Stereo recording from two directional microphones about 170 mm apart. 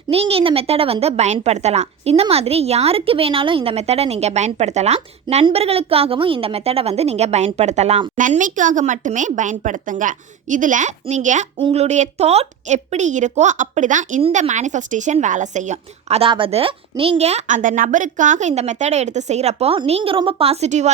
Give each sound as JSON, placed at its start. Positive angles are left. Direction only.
{"t": 0.1, "sound": "a woman's voice", "side_deg": -35}
{"t": 8.2, "sound": "speech", "side_deg": -50}
{"t": 11.5, "sound": "speech", "side_deg": -35}
{"t": 14.2, "sound": "a woman's voice", "side_deg": -35}